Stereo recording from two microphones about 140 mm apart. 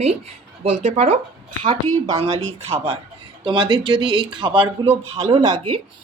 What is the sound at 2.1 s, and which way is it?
Speech, 45° right (ahead or behind).